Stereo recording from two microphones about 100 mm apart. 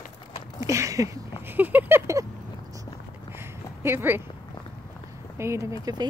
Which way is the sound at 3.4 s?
25° right (ahead or behind).